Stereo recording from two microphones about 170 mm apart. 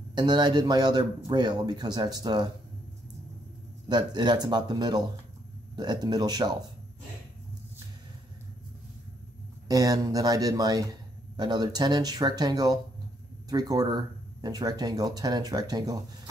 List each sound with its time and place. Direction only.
0.1 s a man's voice: 25° right (ahead or behind)
3.9 s a man's voice: 25° right (ahead or behind)
9.7 s a man's voice: 20° right (ahead or behind)